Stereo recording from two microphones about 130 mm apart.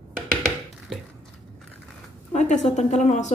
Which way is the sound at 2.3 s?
65° left (ahead or behind).